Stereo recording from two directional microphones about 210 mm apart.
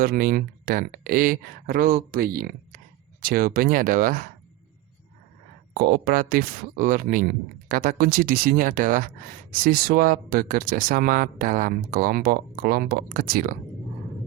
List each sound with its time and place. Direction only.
0.0 s speech: 45° right (ahead or behind)
5.7 s speech: 45° right (ahead or behind)